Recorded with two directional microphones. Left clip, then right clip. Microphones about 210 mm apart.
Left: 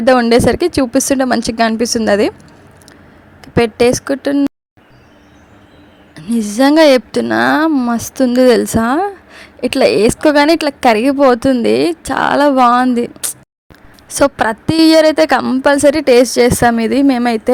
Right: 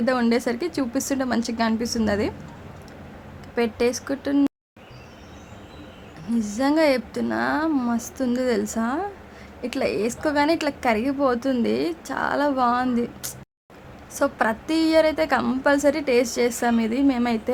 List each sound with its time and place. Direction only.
0.0 s a woman's voice: 35° left (ahead or behind)
3.4 s a woman's voice: 35° left (ahead or behind)
6.3 s a woman's voice: 40° left (ahead or behind)